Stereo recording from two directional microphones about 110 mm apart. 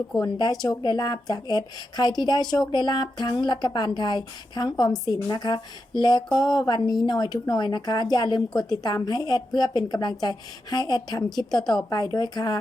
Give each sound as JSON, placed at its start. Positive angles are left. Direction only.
{"t": 0.1, "sound": "a woman's voice", "side_deg": 40}